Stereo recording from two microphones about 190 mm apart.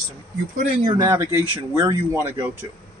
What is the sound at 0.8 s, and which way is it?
Speech, 15° right (ahead or behind).